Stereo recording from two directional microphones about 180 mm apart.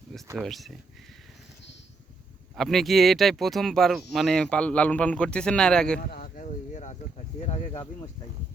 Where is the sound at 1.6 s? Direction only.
80° left.